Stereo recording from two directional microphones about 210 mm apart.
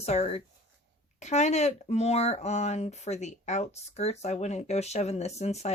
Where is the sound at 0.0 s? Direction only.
30° left (ahead or behind).